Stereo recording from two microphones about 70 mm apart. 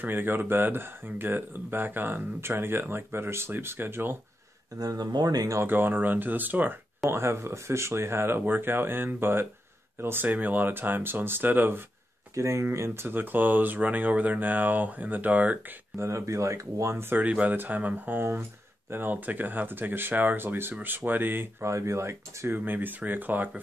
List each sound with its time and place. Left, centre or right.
0.0 s speech: right
4.7 s speech: right
5.6 s speech: right
7.1 s speech: right
12.4 s speech: right
16.0 s speech: right
17.2 s speech: right
21.6 s speech: right
22.5 s speech: right